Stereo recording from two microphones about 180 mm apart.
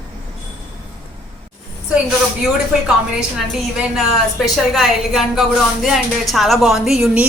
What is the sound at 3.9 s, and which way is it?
A woman's voice, centre (ahead or behind).